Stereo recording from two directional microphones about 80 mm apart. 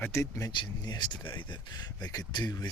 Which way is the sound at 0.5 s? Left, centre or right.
Left.